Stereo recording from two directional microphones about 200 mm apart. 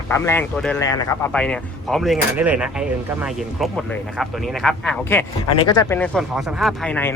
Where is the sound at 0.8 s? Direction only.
15° left (ahead or behind).